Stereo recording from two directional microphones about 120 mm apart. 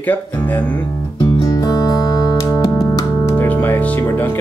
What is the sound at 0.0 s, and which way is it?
Speech, 15° left (ahead or behind).